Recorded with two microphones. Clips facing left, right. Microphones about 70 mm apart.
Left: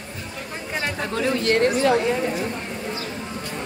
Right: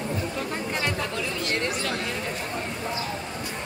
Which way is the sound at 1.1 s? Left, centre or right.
Left.